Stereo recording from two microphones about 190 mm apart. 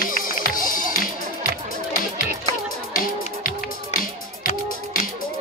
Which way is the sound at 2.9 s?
45° left (ahead or behind).